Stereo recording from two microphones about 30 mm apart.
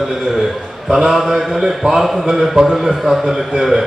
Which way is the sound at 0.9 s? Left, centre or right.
Centre.